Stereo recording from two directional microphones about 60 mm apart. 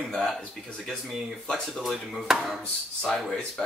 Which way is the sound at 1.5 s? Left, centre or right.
Centre.